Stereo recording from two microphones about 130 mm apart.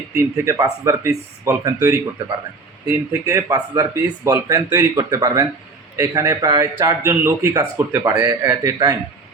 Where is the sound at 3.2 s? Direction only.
30° right (ahead or behind).